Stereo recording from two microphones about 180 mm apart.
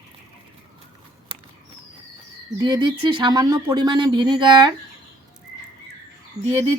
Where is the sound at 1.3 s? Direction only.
30° right (ahead or behind).